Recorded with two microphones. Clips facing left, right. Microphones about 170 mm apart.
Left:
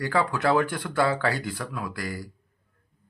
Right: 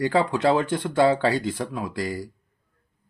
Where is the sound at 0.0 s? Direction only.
25° right (ahead or behind).